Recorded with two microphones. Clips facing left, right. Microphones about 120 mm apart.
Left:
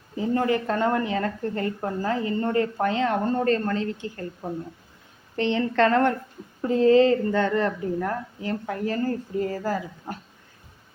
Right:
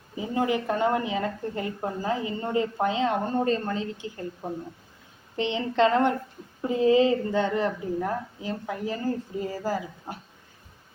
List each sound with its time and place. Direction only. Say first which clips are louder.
0.2 s a woman's voice: left 3 dB; 15° right (ahead or behind)
5.4 s a woman's voice: left 2 dB; 15° right (ahead or behind)